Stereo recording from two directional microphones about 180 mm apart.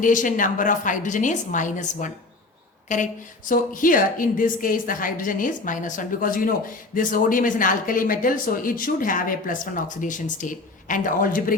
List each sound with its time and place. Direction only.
0.0 s speech: 45° left (ahead or behind)